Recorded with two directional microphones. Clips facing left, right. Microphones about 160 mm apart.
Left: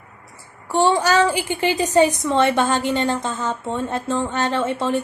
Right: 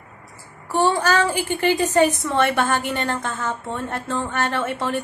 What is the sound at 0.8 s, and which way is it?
A woman's voice, 15° left (ahead or behind).